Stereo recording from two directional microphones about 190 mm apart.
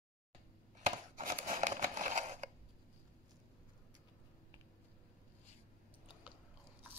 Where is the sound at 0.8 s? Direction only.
40° right (ahead or behind).